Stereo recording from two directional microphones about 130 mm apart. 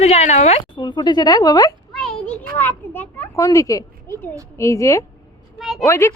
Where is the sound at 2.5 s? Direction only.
15° left (ahead or behind).